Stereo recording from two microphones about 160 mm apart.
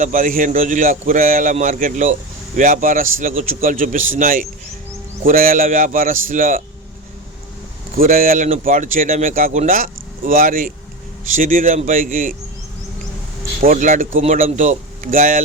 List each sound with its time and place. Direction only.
0.0 s a man's voice: 55° right (ahead or behind)
7.9 s a man's voice: 65° right (ahead or behind)
13.7 s a man's voice: 55° right (ahead or behind)